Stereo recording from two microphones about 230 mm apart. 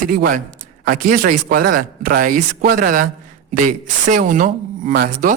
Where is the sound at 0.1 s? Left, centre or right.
Right.